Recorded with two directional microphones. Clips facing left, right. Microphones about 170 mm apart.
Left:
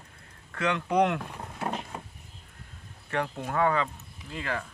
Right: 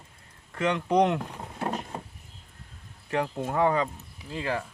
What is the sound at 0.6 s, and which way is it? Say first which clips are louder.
Speech: right 2 dB; 20° right (ahead or behind).